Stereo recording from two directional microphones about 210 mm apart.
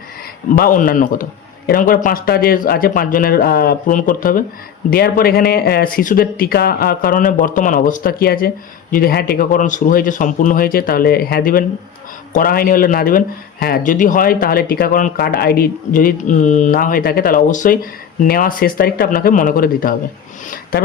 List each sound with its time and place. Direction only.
0.5 s a man's voice: 40° left (ahead or behind)